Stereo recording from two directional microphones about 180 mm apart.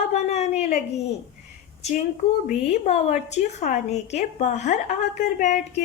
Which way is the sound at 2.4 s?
40° left (ahead or behind).